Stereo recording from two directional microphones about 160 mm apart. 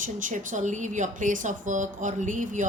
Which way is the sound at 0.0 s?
55° right (ahead or behind).